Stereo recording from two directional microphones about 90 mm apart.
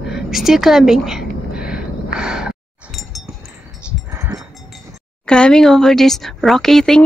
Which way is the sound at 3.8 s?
10° right (ahead or behind).